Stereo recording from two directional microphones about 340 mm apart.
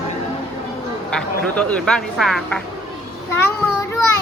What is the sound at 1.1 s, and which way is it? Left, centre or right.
Speech, centre.